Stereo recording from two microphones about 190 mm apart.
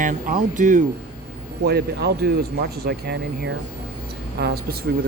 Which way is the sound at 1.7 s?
55° right (ahead or behind).